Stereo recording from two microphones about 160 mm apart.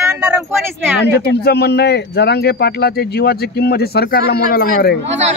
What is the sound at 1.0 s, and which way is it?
Speech, 90° left.